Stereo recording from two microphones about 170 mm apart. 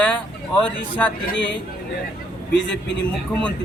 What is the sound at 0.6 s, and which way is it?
Speech, 10° left (ahead or behind).